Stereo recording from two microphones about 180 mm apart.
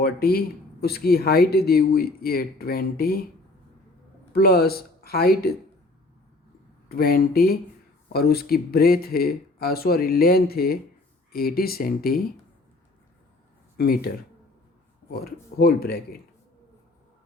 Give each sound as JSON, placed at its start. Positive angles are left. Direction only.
{"t": 0.0, "sound": "speech", "side_deg": 55}
{"t": 4.3, "sound": "speech", "side_deg": 60}
{"t": 6.8, "sound": "speech", "side_deg": 55}
{"t": 13.7, "sound": "speech", "side_deg": 55}
{"t": 15.2, "sound": "speech", "side_deg": 60}